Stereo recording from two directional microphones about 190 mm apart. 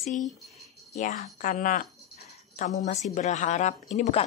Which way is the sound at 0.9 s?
40° left (ahead or behind).